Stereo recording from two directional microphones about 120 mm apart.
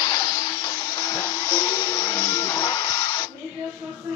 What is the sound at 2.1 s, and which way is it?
Music, 20° left (ahead or behind).